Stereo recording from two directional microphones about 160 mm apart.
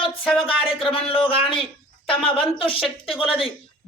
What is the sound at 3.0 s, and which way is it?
Speech, 35° left (ahead or behind).